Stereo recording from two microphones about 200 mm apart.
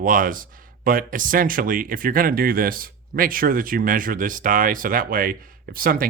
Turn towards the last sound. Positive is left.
turn(degrees=-45)  # may be behind; listen again after turning